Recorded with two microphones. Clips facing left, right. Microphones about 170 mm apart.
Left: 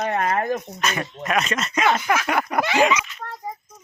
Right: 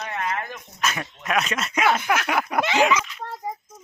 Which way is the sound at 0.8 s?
5° right (ahead or behind).